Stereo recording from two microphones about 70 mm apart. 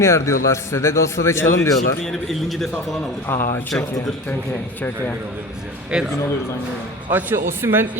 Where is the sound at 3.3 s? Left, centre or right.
Left.